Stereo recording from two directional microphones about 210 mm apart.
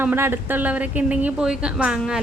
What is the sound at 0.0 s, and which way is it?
Speech, 10° right (ahead or behind).